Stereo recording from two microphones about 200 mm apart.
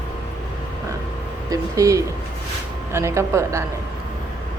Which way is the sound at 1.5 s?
15° right (ahead or behind).